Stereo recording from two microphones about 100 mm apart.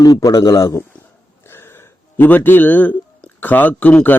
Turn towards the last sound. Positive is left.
turn(degrees=15)  # may be behind; listen again after turning